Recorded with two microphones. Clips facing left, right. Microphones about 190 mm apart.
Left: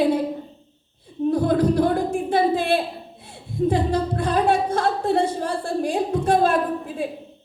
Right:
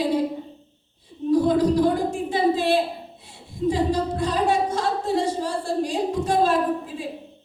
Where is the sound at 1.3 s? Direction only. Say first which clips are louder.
Right 1 dB; 55° left (ahead or behind).